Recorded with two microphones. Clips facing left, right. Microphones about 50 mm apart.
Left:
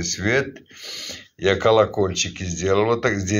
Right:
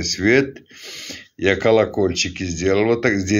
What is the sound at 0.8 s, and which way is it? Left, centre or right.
Speech, right.